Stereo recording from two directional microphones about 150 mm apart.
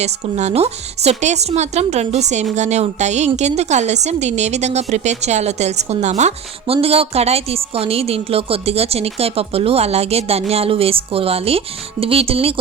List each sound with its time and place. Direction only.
0.0 s a woman's voice: 45° right (ahead or behind)